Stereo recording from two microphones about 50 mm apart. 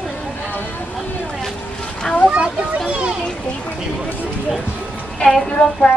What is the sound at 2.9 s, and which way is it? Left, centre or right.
Children playing, right.